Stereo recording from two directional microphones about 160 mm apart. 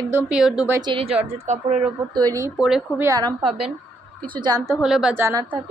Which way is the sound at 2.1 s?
25° right (ahead or behind).